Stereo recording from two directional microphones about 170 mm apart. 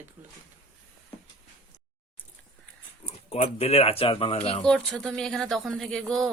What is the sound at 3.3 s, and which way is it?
Speech, 35° left (ahead or behind).